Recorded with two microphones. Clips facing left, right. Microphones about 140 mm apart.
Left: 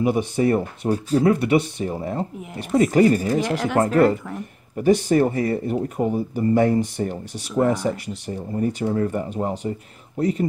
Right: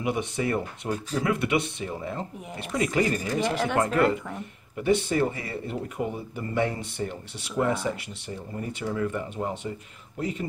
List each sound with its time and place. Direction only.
0.0 s speech: 35° left (ahead or behind)
3.4 s speech: centre (ahead or behind)
3.8 s speech: 35° left (ahead or behind)